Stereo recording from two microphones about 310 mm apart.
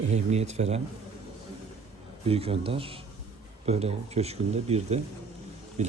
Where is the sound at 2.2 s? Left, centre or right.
Centre.